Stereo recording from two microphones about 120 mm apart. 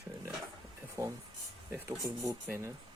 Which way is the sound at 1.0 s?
30° right (ahead or behind).